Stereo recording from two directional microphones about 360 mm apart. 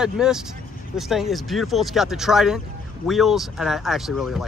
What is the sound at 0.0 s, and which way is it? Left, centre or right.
Speech, centre.